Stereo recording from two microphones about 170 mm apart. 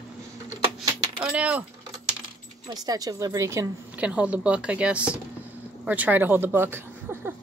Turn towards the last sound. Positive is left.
turn(degrees=-10)  # may be behind; listen again after turning